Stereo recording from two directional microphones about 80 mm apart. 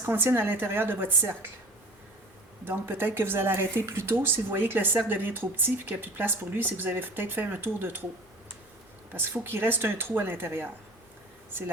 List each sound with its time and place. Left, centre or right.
0.0 s a woman's voice: right
2.6 s a woman's voice: right
9.1 s a woman's voice: right